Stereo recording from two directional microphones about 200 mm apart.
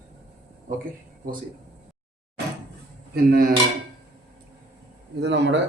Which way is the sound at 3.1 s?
50° right (ahead or behind).